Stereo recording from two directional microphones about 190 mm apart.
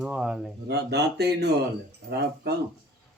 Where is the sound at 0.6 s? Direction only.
60° right (ahead or behind).